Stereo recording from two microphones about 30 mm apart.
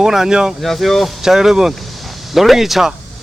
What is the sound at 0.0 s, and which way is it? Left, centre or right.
Speech, centre.